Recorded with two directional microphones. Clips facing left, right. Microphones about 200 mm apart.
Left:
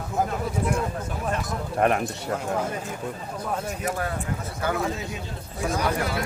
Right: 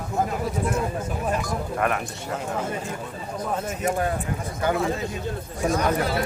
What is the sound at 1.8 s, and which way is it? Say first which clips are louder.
Speech: left 4 dB; 40° left (ahead or behind).